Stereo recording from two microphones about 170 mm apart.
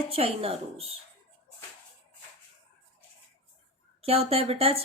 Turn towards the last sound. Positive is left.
turn(degrees=-35)  # may be behind; listen again after turning